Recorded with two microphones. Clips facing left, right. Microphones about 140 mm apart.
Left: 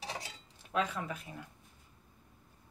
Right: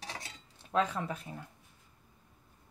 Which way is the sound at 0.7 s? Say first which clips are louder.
Right 3 dB; 30° right (ahead or behind).